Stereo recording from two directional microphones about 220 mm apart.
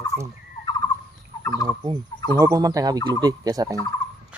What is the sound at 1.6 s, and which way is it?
Speech, 15° right (ahead or behind).